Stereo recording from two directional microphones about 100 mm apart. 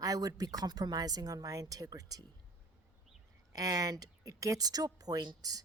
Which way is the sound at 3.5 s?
40° right (ahead or behind).